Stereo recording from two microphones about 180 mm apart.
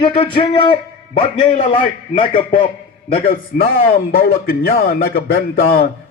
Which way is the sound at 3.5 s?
55° left (ahead or behind).